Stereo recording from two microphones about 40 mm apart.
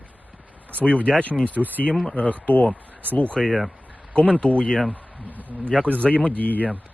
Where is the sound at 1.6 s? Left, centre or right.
Centre.